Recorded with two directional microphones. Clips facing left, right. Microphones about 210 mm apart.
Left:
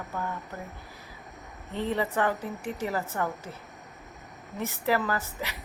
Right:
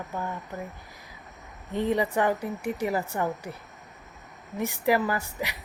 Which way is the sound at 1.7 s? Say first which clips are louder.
Right 3 dB; 15° right (ahead or behind).